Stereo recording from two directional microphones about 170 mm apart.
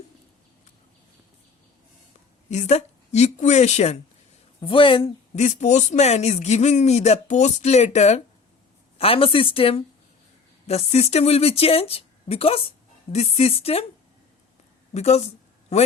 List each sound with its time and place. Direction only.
2.5 s speech: 40° left (ahead or behind)
4.6 s speech: 30° left (ahead or behind)
14.9 s speech: 40° left (ahead or behind)